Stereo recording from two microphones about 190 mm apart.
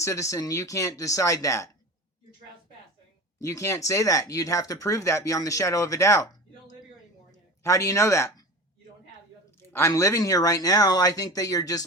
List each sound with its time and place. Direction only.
0.0 s speech: 15° left (ahead or behind)
3.4 s speech: 15° left (ahead or behind)
7.3 s a sound: 15° left (ahead or behind)
9.6 s speech: 15° left (ahead or behind)